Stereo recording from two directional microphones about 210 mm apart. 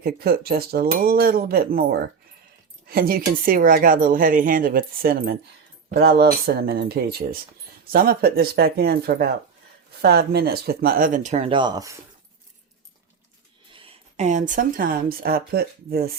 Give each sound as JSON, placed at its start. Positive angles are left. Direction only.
{"t": 0.0, "sound": "speech", "side_deg": -45}
{"t": 13.7, "sound": "speech", "side_deg": -30}